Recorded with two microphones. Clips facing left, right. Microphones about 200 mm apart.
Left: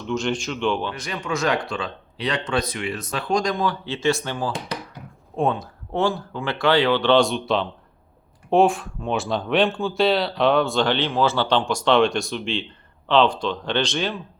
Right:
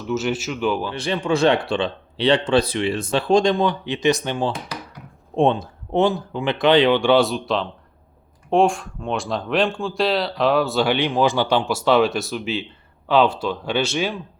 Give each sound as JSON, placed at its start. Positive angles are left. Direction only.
{"t": 0.1, "sound": "speech", "side_deg": -5}
{"t": 0.9, "sound": "speech", "side_deg": -30}